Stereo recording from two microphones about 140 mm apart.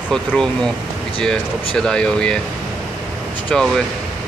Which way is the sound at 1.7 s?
5° left (ahead or behind).